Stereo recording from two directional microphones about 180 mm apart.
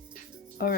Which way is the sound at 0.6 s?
55° left (ahead or behind).